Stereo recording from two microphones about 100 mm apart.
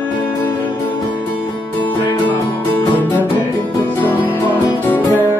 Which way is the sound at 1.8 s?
15° left (ahead or behind).